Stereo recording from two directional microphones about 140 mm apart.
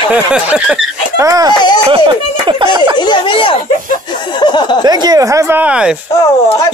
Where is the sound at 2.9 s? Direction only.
35° left (ahead or behind).